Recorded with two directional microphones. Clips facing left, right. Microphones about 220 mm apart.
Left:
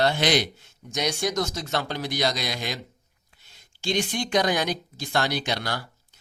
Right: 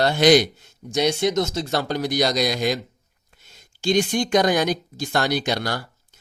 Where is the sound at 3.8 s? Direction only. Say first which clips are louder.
Right 6 dB; 45° right (ahead or behind).